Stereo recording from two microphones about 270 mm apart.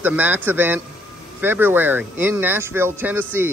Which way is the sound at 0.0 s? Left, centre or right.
Centre.